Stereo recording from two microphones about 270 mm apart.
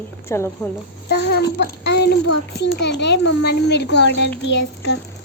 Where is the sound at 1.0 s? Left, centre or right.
Left.